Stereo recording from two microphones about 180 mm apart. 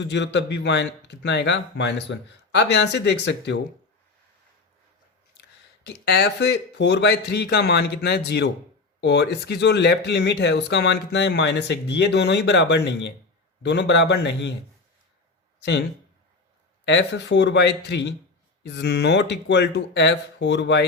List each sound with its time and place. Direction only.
0.0 s speech: 75° left (ahead or behind)
5.4 s a man's voice: 65° left (ahead or behind)
16.8 s speech: 75° left (ahead or behind)